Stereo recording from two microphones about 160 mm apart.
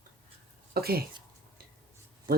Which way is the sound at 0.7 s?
75° right (ahead or behind).